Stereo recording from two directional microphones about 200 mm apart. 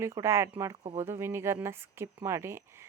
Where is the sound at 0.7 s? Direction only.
30° right (ahead or behind).